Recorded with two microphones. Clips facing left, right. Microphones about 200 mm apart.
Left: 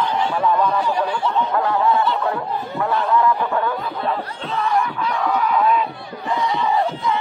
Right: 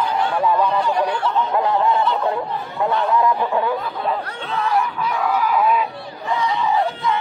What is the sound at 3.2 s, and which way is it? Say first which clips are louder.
Snicker: right 1 dB; 15° right (ahead or behind).